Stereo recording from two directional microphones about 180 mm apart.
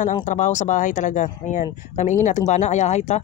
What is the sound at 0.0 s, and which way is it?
Speech, 45° left (ahead or behind).